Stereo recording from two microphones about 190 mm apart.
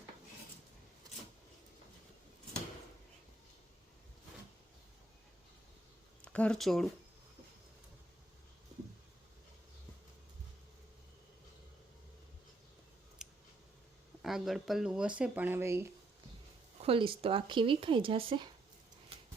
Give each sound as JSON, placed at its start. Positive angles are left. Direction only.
{"t": 6.2, "sound": "speech", "side_deg": 5}
{"t": 13.2, "sound": "scissors", "side_deg": 0}
{"t": 14.2, "sound": "speech", "side_deg": 0}
{"t": 16.8, "sound": "speech", "side_deg": -30}